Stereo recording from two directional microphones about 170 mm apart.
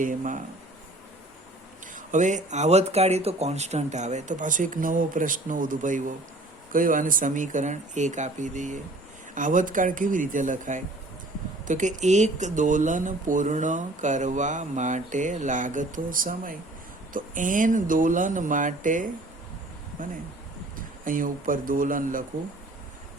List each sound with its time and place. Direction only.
0.0 s speech: 50° right (ahead or behind)
2.0 s speech: 45° right (ahead or behind)
21.0 s speech: 50° right (ahead or behind)